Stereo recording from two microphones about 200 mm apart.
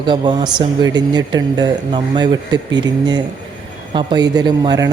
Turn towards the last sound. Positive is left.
turn(degrees=-20)  # may be behind; listen again after turning